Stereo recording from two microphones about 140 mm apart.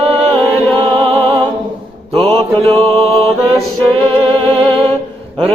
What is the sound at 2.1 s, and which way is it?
Mantra, 45° right (ahead or behind).